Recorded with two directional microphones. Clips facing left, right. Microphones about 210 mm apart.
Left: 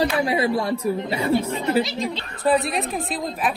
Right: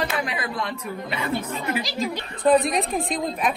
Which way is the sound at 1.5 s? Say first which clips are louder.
Left 6 dB; centre (ahead or behind).